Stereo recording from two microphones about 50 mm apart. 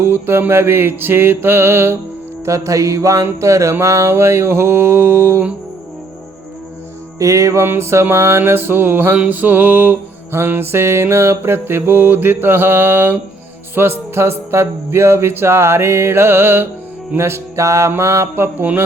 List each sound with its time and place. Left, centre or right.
0.1 s mantra: right
2.4 s music: right
3.4 s mantra: right
4.1 s mantra: right
7.2 s music: right
7.7 s music: right
8.1 s mantra: right
9.3 s music: right
10.3 s mantra: right
13.7 s music: right
18.6 s music: right